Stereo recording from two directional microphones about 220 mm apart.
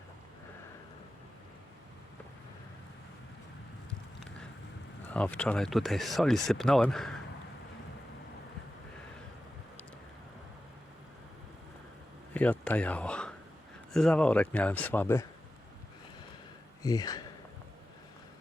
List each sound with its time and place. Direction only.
5.1 s speech: 5° left (ahead or behind)
12.3 s speech: 5° left (ahead or behind)
16.8 s speech: 15° left (ahead or behind)